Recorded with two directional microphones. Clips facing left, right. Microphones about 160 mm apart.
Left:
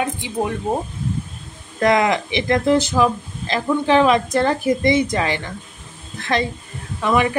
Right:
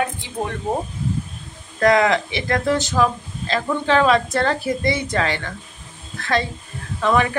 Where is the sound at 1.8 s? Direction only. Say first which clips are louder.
Right 1 dB; 20° left (ahead or behind).